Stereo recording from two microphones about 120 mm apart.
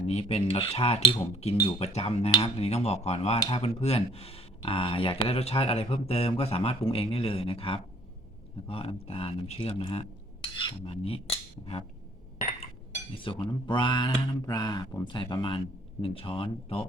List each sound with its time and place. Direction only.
0.0 s speech: 60° left (ahead or behind); by 10.9 s 45° left (ahead or behind)
10.9 s speech: 55° left (ahead or behind)
13.1 s speech: 45° left (ahead or behind)